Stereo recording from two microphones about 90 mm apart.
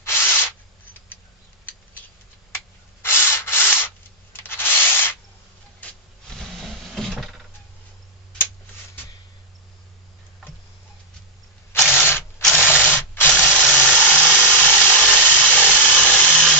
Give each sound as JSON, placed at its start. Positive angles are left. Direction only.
{"t": 0.1, "sound": "a sound", "side_deg": 25}
{"t": 3.0, "sound": "rub", "side_deg": 25}
{"t": 5.8, "sound": "drawer open or close", "side_deg": 5}
{"t": 11.9, "sound": "sanding", "side_deg": 25}
{"t": 13.3, "sound": "a sound", "side_deg": 20}
{"t": 14.5, "sound": "tools", "side_deg": 20}